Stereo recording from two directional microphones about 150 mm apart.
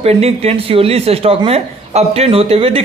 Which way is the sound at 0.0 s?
45° right (ahead or behind).